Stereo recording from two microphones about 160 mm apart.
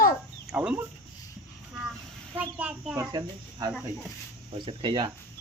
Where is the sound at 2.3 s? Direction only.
10° right (ahead or behind).